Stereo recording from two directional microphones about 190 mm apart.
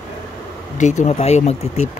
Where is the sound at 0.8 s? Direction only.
40° left (ahead or behind).